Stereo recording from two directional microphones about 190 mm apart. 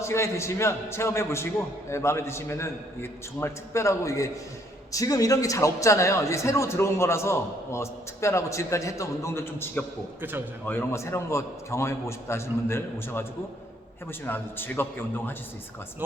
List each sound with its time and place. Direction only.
0.0 s a man's voice: 15° left (ahead or behind)
14.3 s a man's voice: 10° left (ahead or behind)